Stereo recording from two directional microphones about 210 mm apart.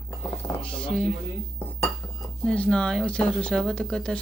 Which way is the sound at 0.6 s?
5° left (ahead or behind).